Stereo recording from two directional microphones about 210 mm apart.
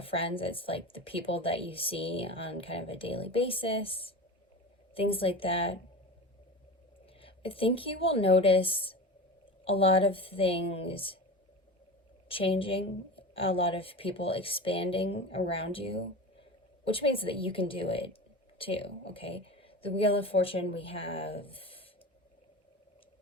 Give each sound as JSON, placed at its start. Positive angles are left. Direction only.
{"t": 0.0, "sound": "a woman's voice", "side_deg": 25}
{"t": 7.2, "sound": "a woman's voice", "side_deg": 25}
{"t": 12.3, "sound": "a woman's voice", "side_deg": 25}